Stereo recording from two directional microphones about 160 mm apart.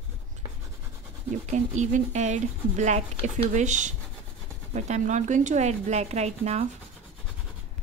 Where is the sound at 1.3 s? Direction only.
50° right (ahead or behind).